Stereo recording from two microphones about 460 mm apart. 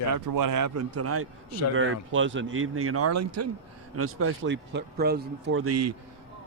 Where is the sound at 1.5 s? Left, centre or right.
Left.